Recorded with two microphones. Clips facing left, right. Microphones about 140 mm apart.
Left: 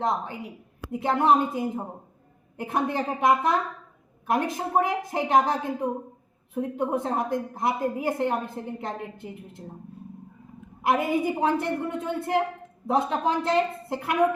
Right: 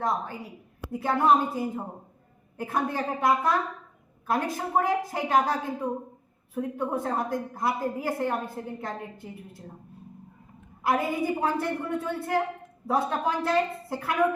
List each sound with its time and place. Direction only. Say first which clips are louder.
0.0 s a woman's voice: left 2 dB; 20° left (ahead or behind)
10.8 s a woman's voice: left 2 dB; 20° left (ahead or behind)